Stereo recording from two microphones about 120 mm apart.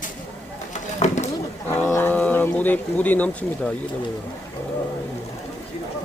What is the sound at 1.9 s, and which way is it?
Speech, 15° left (ahead or behind).